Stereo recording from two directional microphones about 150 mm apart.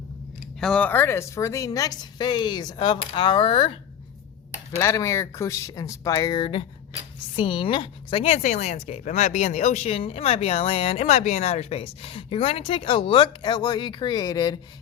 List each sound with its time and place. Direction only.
0.6 s a woman's voice: 5° left (ahead or behind); by 3.7 s 35° left (ahead or behind)
4.8 s a woman's voice: 20° left (ahead or behind)